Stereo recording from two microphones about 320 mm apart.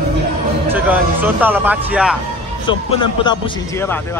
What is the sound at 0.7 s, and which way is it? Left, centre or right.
Speech, centre.